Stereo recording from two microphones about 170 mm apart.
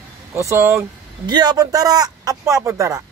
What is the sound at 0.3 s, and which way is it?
A man's voice, 15° right (ahead or behind).